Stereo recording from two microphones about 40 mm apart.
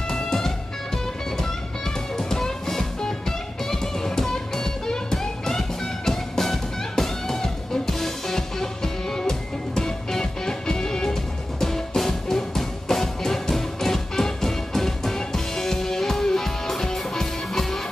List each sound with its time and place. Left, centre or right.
0.1 s music: centre
2.1 s music: centre